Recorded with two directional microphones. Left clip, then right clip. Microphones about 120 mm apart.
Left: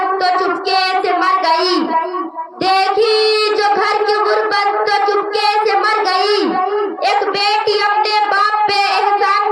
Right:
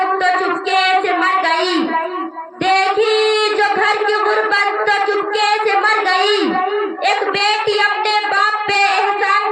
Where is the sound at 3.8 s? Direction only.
20° left (ahead or behind).